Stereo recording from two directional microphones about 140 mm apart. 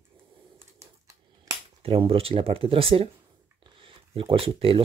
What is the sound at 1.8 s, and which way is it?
Speech, 45° right (ahead or behind).